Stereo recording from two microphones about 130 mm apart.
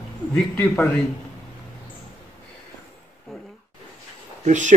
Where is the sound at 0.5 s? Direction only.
15° left (ahead or behind).